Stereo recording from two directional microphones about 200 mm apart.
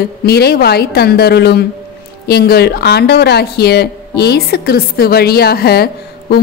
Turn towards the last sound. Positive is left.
turn(degrees=50)  # may be behind; listen again after turning